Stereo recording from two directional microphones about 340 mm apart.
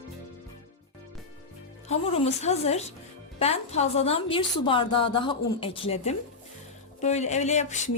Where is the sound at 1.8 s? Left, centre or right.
Centre.